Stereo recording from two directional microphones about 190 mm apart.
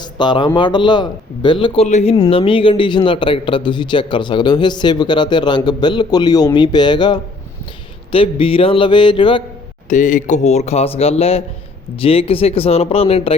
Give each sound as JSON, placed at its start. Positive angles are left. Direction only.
{"t": 0.0, "sound": "a man's voice", "side_deg": 25}
{"t": 2.1, "sound": "a man's voice", "side_deg": 25}
{"t": 9.9, "sound": "speech", "side_deg": 45}